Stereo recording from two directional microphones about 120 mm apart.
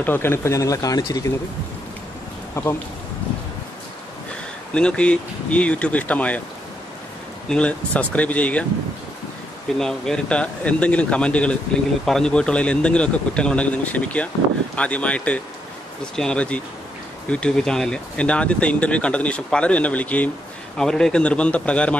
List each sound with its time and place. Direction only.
0.0 s speech: 20° left (ahead or behind)
2.6 s speech: 25° left (ahead or behind)
4.7 s speech: 10° left (ahead or behind)
7.4 s speech: 10° left (ahead or behind)
9.8 s speech: 5° left (ahead or behind)